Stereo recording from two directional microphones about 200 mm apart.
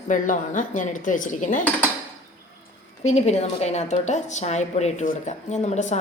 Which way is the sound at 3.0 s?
35° left (ahead or behind).